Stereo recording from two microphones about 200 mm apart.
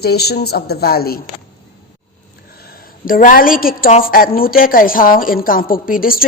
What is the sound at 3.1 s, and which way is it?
A woman's voice, 45° left (ahead or behind).